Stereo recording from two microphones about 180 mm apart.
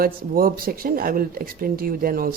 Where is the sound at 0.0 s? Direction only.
55° right (ahead or behind).